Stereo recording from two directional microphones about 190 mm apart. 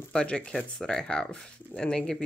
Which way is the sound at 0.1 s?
5° left (ahead or behind).